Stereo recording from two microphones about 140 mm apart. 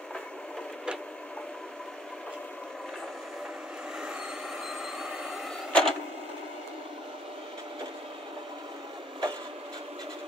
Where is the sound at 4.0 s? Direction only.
5° right (ahead or behind).